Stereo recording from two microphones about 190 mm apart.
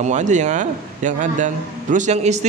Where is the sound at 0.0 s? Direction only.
40° right (ahead or behind).